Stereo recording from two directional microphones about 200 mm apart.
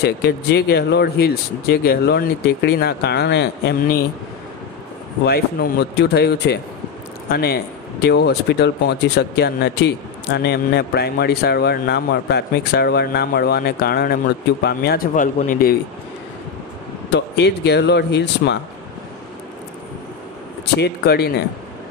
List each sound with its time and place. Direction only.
0.0 s a man's voice: 55° left (ahead or behind)
5.2 s a man's voice: 50° left (ahead or behind)
17.1 s speech: 60° left (ahead or behind)
20.7 s a man's voice: 55° left (ahead or behind)